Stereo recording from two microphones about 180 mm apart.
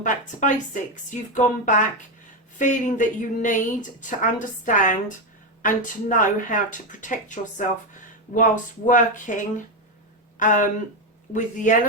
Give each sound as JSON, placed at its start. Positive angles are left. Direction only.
{"t": 0.0, "sound": "speech", "side_deg": 45}
{"t": 8.9, "sound": "speech", "side_deg": 45}